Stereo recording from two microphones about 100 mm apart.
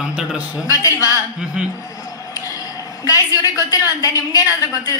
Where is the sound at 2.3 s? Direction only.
35° left (ahead or behind).